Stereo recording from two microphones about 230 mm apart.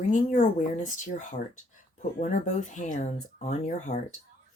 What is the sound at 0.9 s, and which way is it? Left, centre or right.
Speech, left.